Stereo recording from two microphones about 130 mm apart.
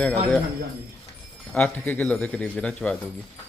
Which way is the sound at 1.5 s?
10° left (ahead or behind).